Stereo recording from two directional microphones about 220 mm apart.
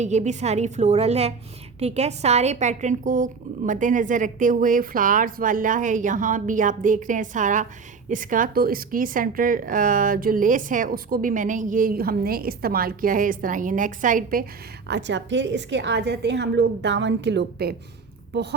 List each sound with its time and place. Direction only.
0.0 s a woman's voice: 30° right (ahead or behind)
14.8 s a woman's voice: 50° right (ahead or behind)